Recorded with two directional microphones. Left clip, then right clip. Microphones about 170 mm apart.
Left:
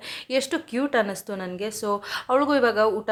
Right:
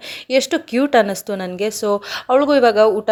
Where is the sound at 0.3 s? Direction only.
25° right (ahead or behind).